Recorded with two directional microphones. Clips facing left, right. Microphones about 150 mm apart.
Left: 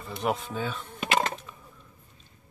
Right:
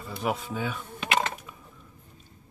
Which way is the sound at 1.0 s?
40° left (ahead or behind).